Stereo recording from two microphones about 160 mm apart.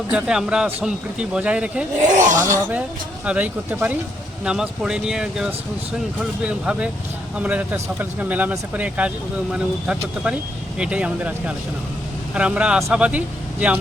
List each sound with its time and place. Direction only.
0.1 s a man's voice: 5° right (ahead or behind)
2.1 s speech: 55° right (ahead or behind)
2.4 s a man's voice: 15° right (ahead or behind)